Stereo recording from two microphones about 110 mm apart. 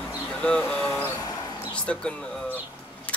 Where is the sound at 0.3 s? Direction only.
10° left (ahead or behind).